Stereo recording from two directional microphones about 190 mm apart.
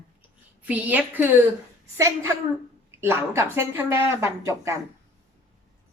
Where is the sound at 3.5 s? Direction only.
15° right (ahead or behind).